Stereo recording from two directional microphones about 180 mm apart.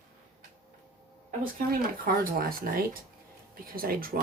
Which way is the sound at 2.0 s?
50° right (ahead or behind).